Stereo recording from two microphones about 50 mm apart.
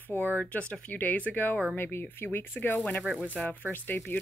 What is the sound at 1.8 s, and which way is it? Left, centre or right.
Speech, left.